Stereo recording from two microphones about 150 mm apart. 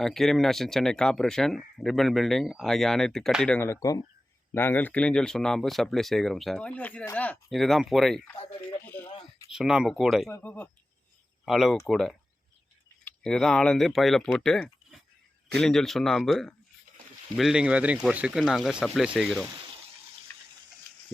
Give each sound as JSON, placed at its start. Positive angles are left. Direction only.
{"t": 0.0, "sound": "speech", "side_deg": 0}
{"t": 3.6, "sound": "speech", "side_deg": 20}
{"t": 8.8, "sound": "a sound", "side_deg": 10}
{"t": 9.5, "sound": "speech", "side_deg": -5}
{"t": 10.2, "sound": "speech", "side_deg": 10}
{"t": 11.4, "sound": "speech", "side_deg": 0}
{"t": 20.3, "sound": "water", "side_deg": 10}